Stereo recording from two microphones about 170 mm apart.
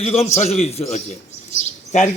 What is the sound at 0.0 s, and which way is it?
A man's voice, 40° left (ahead or behind).